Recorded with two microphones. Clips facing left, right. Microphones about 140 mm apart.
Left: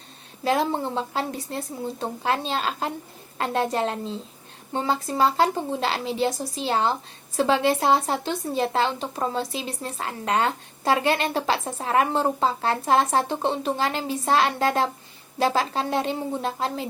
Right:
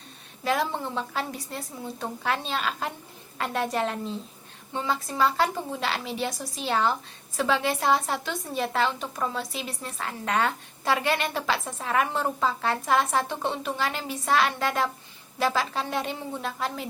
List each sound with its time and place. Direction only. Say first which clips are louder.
0.4 s a woman's voice: left 4 dB; 30° left (ahead or behind)